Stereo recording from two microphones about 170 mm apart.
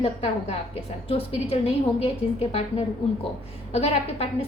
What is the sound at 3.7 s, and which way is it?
Speech, 40° left (ahead or behind).